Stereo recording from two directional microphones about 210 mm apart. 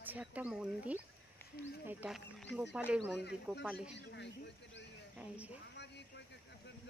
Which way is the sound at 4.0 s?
55° left (ahead or behind).